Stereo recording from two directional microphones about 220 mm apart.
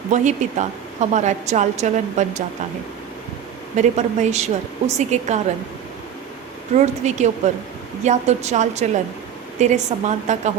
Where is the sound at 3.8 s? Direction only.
30° right (ahead or behind).